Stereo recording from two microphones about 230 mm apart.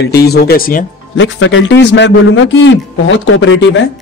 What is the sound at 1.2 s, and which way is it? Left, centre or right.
A man's voice, left.